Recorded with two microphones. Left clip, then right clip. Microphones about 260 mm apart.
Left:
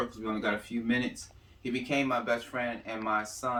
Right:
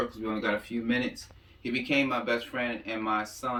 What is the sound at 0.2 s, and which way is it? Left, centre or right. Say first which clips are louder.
Speech: right 2 dB; centre.